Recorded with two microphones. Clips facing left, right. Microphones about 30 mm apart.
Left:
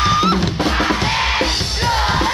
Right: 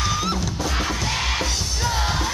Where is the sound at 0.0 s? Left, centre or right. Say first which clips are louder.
Left 9 dB; left.